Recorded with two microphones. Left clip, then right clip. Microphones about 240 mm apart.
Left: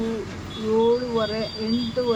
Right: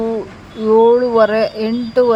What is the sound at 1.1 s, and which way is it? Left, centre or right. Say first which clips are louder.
Speech: right 13 dB; right.